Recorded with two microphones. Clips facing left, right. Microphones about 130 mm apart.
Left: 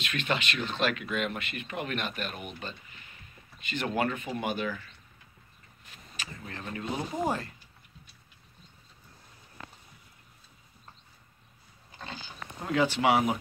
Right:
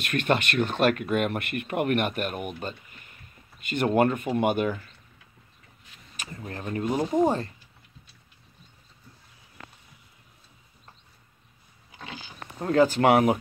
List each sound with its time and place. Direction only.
0.0 s speech: 50° right (ahead or behind)
6.4 s speech: 40° right (ahead or behind)
7.2 s speech: 25° right (ahead or behind)
12.6 s speech: 45° right (ahead or behind)